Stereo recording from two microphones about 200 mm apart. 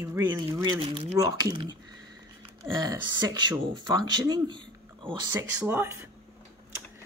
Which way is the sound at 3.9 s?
20° right (ahead or behind).